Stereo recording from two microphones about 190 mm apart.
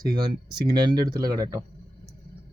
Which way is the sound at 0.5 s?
20° right (ahead or behind).